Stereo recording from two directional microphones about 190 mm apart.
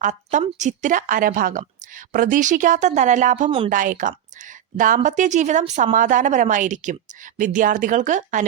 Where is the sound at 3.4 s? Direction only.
30° right (ahead or behind).